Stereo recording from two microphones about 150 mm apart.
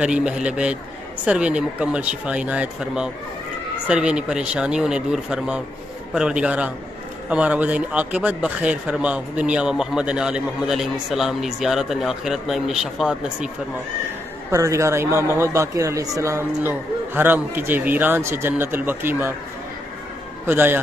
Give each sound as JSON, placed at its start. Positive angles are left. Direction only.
{"t": 0.0, "sound": "a man's voice", "side_deg": -5}
{"t": 14.5, "sound": "speech", "side_deg": -20}
{"t": 20.4, "sound": "speech", "side_deg": -15}